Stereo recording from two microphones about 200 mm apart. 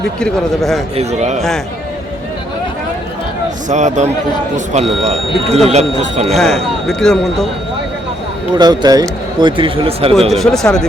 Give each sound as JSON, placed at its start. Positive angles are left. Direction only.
{"t": 0.2, "sound": "speech", "side_deg": 0}
{"t": 0.9, "sound": "speech", "side_deg": -35}
{"t": 1.4, "sound": "speech", "side_deg": 0}
{"t": 3.7, "sound": "speech", "side_deg": -35}
{"t": 6.3, "sound": "speech", "side_deg": 0}
{"t": 8.5, "sound": "speech", "side_deg": -20}
{"t": 10.2, "sound": "speech", "side_deg": 0}